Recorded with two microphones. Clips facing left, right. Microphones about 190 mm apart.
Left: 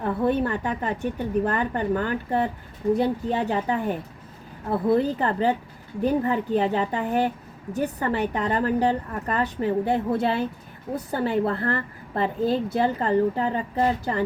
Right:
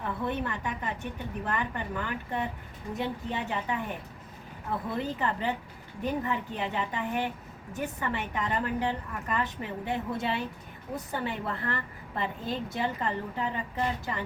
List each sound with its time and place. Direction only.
0.3 s a woman's voice: 35° left (ahead or behind)